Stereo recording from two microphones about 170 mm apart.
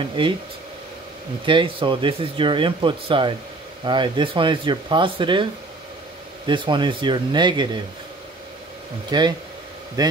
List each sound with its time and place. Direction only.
0.0 s speech: 30° right (ahead or behind)
1.4 s speech: 30° right (ahead or behind)
9.1 s speech: 25° right (ahead or behind)